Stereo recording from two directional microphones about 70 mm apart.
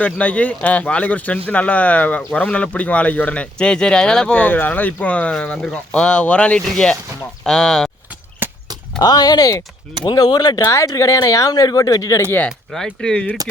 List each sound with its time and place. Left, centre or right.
0.0 s speech: centre
8.4 s a sound: right
9.0 s speech: left
10.0 s speech: left
10.8 s speech: left
12.5 s speech: centre